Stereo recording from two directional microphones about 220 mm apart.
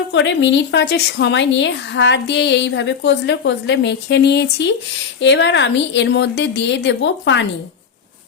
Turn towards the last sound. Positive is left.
turn(degrees=55)  # may be behind; listen again after turning